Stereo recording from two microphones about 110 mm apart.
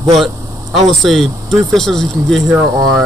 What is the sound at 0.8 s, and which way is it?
Speech, centre (ahead or behind).